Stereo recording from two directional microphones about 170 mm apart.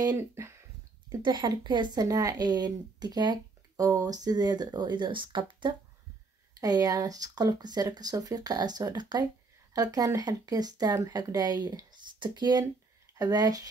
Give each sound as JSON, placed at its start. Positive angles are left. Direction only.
{"t": 0.0, "sound": "speech", "side_deg": -20}
{"t": 1.2, "sound": "speech", "side_deg": -25}